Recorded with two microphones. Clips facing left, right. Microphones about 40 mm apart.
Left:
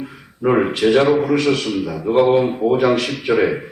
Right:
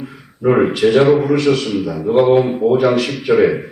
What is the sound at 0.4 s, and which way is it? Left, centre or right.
A man's voice, centre.